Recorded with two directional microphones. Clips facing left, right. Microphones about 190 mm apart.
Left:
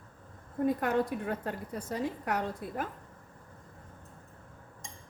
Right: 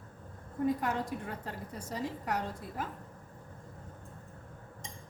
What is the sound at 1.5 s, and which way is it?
A woman's voice, 60° left (ahead or behind).